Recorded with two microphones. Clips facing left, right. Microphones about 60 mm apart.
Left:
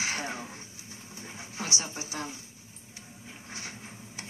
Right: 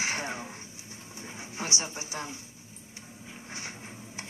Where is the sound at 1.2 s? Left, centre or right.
Right.